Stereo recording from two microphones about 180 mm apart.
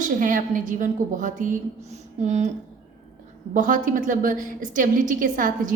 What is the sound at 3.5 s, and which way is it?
A woman's voice, 45° right (ahead or behind).